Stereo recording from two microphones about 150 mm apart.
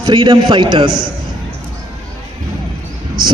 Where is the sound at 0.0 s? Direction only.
25° right (ahead or behind).